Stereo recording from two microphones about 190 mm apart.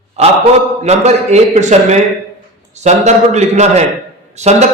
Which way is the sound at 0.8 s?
35° right (ahead or behind).